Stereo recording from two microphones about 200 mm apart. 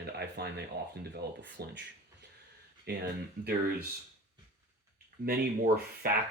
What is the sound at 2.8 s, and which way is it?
Speech, 50° right (ahead or behind).